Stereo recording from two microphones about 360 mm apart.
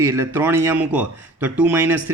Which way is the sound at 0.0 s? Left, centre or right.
Centre.